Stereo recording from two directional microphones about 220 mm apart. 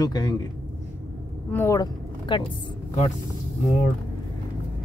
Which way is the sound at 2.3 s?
20° left (ahead or behind).